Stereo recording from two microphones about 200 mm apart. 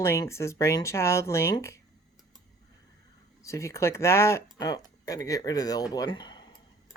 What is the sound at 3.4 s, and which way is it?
Speech, 15° left (ahead or behind).